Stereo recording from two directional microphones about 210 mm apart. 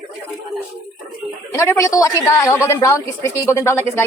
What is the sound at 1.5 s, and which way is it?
Speech, 15° left (ahead or behind).